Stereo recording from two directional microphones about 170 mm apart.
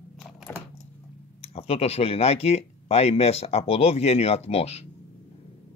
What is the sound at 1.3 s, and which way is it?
Speech, 35° left (ahead or behind).